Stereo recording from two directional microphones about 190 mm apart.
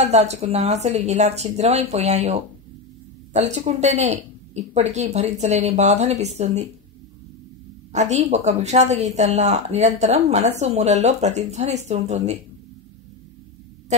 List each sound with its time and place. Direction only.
0.0 s a woman's voice: 35° right (ahead or behind)
7.9 s a woman's voice: 40° right (ahead or behind)